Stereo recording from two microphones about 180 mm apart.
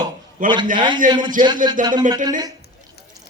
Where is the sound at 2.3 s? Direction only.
20° right (ahead or behind).